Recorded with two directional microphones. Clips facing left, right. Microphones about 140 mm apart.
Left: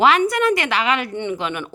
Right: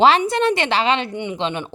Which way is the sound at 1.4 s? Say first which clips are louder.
Right 2 dB; 25° right (ahead or behind).